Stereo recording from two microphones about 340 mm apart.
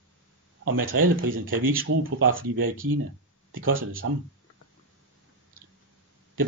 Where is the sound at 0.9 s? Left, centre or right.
Right.